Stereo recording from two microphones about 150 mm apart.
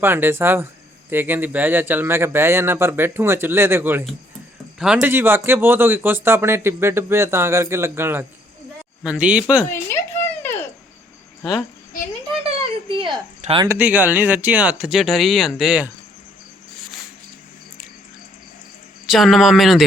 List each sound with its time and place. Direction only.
0.0 s speech: 15° right (ahead or behind)
10.4 s a sound: 15° left (ahead or behind)
12.4 s a sound: 40° right (ahead or behind)
13.4 s speech: 35° right (ahead or behind)
13.7 s speech: 10° right (ahead or behind)
19.0 s a man's voice: centre (ahead or behind)